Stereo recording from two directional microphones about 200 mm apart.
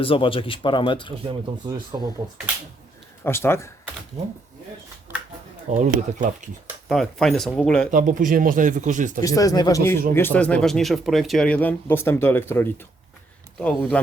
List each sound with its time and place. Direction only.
0.0 s speech: 25° left (ahead or behind)
1.3 s speech: 20° right (ahead or behind)
3.2 s speech: 10° left (ahead or behind)
5.7 s speech: 35° right (ahead or behind)
6.8 s speech: centre (ahead or behind)
7.9 s speech: 40° right (ahead or behind)
9.2 s speech: 15° left (ahead or behind)